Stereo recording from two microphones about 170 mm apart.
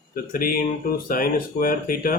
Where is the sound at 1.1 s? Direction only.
55° left (ahead or behind).